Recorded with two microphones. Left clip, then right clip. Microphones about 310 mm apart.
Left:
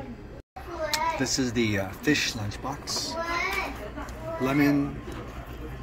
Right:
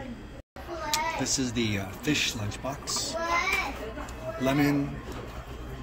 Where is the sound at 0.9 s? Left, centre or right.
Centre.